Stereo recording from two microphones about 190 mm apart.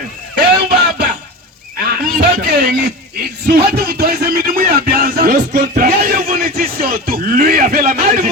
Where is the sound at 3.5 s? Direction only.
55° right (ahead or behind).